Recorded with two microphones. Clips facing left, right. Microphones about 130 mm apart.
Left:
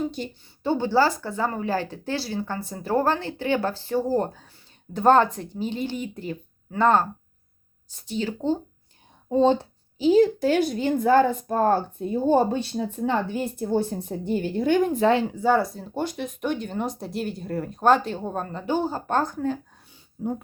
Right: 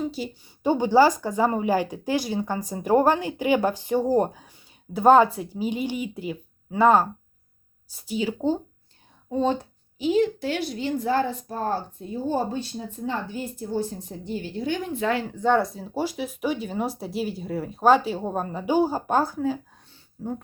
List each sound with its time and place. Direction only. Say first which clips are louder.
0.0 s a sound: even; centre (ahead or behind)
0.4 s speech: right 2 dB; 15° right (ahead or behind)
9.3 s a woman's voice: left 5 dB; 30° left (ahead or behind); by 15.0 s 50° left (ahead or behind)
15.0 s speech: left 3 dB; 25° left (ahead or behind)
15.3 s speech: even; 5° left (ahead or behind)
19.9 s a sound: left 3 dB; 15° left (ahead or behind)